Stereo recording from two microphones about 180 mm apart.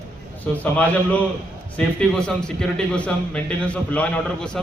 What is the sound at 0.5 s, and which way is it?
A man's voice, 10° left (ahead or behind).